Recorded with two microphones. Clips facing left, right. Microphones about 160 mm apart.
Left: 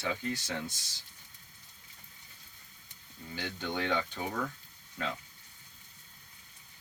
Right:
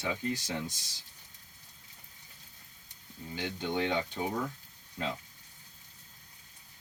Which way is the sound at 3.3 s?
20° right (ahead or behind).